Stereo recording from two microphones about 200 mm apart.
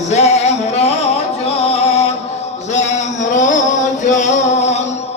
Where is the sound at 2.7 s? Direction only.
35° left (ahead or behind).